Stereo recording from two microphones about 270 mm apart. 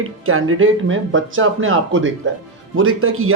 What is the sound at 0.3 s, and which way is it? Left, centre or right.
A woman's voice, right.